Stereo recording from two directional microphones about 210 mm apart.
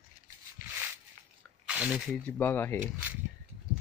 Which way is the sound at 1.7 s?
5° right (ahead or behind).